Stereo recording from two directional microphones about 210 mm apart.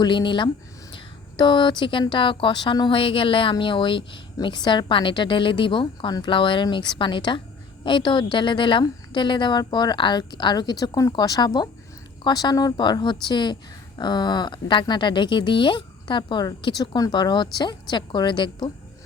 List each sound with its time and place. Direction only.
0.0 s speech: 20° left (ahead or behind)